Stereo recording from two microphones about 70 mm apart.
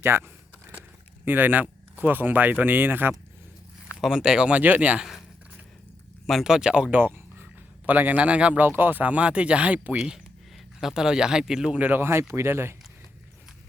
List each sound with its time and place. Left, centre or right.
0.0 s speech: right
4.0 s speech: centre
6.2 s speech: centre
6.9 s a sound: right
7.9 s speech: right
8.6 s speech: right
10.8 s speech: centre
11.8 s speech: right